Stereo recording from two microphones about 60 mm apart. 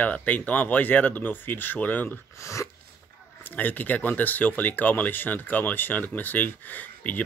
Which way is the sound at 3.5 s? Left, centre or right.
Left.